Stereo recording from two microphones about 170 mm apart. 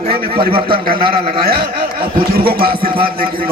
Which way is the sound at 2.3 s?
60° right (ahead or behind).